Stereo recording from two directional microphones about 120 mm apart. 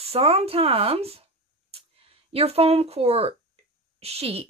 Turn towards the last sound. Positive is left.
turn(degrees=-55)  # may be behind; listen again after turning